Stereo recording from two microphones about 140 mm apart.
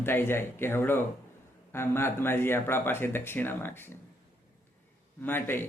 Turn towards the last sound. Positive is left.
turn(degrees=15)  # may be behind; listen again after turning